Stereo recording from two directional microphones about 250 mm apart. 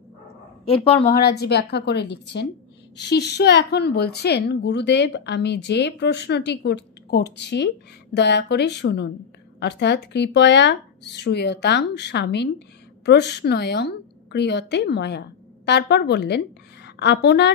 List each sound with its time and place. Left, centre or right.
0.7 s speech: left
1.1 s a woman's voice: left